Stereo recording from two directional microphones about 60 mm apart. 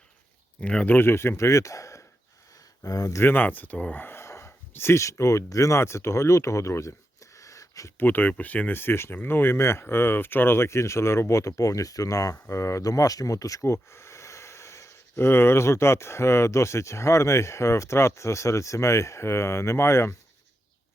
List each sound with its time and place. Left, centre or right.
0.6 s speech: centre
0.9 s speech: left
2.8 s speech: left
3.2 s speech: left
4.2 s wheeze: left
4.7 s speech: left
5.5 s speech: left
7.9 s speech: left